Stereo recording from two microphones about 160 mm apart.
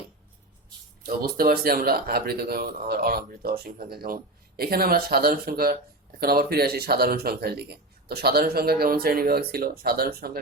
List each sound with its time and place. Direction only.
1.0 s speech: 65° right (ahead or behind)